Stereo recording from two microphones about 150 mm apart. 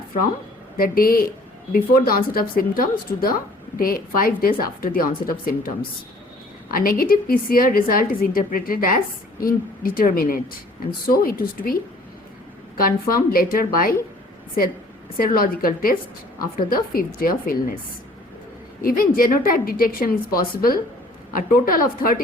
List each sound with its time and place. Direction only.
0.8 s a woman's voice: 75° left (ahead or behind)
6.7 s a woman's voice: 75° left (ahead or behind)
15.2 s a woman's voice: 75° left (ahead or behind)
18.8 s a woman's voice: 75° left (ahead or behind)